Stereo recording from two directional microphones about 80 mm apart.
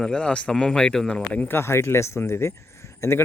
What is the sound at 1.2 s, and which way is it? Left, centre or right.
Speech, centre.